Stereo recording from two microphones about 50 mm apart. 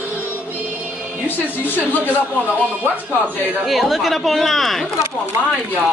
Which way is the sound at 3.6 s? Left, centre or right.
Centre.